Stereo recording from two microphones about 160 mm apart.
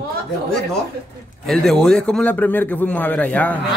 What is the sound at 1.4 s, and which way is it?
A man's voice, 5° left (ahead or behind).